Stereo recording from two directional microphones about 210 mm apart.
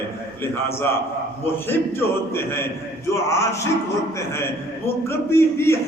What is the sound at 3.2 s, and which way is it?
Speech, 15° left (ahead or behind).